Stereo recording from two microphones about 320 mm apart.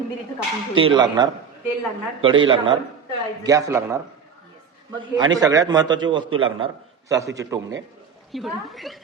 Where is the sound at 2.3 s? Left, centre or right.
Right.